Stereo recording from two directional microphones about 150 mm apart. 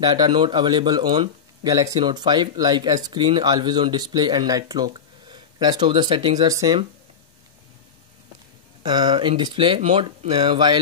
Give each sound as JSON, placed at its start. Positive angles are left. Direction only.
{"t": 0.0, "sound": "speech", "side_deg": -30}
{"t": 8.8, "sound": "speech", "side_deg": -30}